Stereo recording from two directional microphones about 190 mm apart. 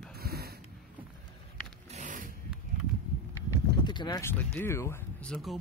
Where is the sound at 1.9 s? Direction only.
40° right (ahead or behind).